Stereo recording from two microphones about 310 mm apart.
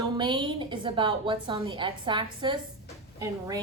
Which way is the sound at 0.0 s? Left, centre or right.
Centre.